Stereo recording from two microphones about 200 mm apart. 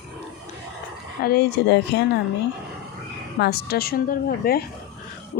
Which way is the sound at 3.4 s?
50° left (ahead or behind).